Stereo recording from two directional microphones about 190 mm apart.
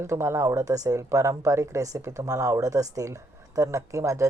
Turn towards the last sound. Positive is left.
turn(degrees=-15)  # may be behind; listen again after turning